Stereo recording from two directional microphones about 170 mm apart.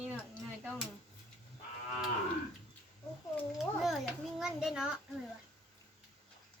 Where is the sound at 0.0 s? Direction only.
10° right (ahead or behind).